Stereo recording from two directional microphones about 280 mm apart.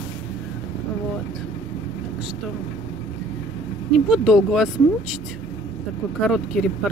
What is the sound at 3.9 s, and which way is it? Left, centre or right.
Speech, centre.